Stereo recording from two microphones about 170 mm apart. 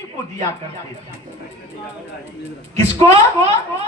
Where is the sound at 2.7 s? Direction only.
40° right (ahead or behind).